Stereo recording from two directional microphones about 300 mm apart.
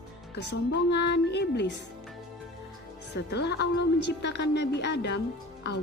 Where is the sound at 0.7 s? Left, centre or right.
Left.